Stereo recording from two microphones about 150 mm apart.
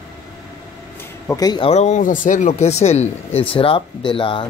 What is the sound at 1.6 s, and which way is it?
Speech, 45° left (ahead or behind).